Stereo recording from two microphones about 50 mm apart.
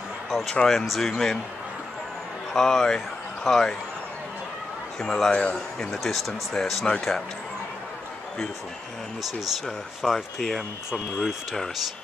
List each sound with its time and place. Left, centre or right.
0.3 s speech: centre
2.5 s speech: centre
5.0 s speech: centre
5.3 s a man's voice: left
5.8 s speech: centre
10.0 s speech: centre
10.9 s speech: centre